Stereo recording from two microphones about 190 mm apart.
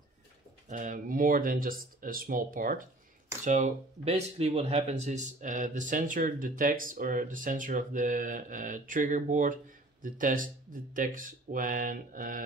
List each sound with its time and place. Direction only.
0.7 s speech: 45° right (ahead or behind)